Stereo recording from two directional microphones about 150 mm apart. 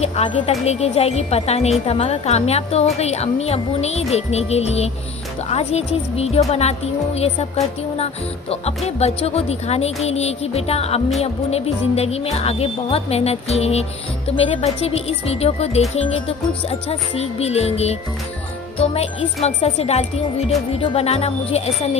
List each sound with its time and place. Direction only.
0.0 s a woman's voice: 45° left (ahead or behind)
8.0 s a woman's voice: 45° left (ahead or behind)